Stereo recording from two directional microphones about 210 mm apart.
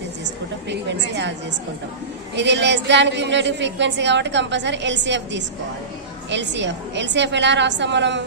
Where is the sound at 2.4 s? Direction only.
55° right (ahead or behind).